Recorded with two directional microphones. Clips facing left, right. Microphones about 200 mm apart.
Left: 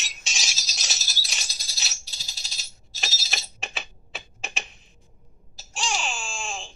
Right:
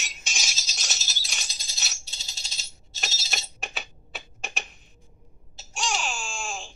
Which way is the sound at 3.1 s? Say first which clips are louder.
Even; 25° right (ahead or behind).